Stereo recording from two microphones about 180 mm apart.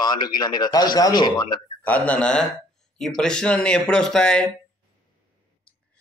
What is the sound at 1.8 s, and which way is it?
A man's voice, 10° left (ahead or behind).